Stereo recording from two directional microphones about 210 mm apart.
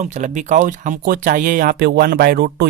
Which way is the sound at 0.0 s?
35° right (ahead or behind).